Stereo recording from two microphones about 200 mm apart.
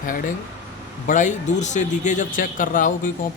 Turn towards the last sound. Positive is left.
turn(degrees=40)  # may be behind; listen again after turning